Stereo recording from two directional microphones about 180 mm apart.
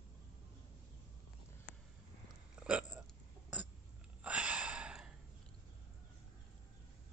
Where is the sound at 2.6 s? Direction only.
5° right (ahead or behind).